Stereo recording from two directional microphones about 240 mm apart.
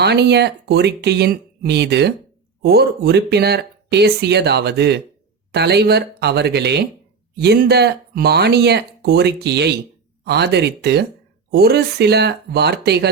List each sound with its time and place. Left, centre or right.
0.0 s speech: right